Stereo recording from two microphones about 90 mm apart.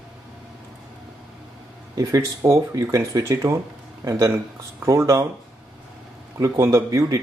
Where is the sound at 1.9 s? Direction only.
40° right (ahead or behind).